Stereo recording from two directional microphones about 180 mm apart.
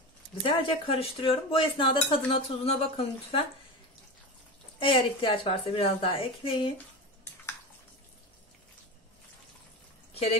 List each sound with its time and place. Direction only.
0.4 s speech: 30° left (ahead or behind)
4.7 s a woman's voice: 30° left (ahead or behind)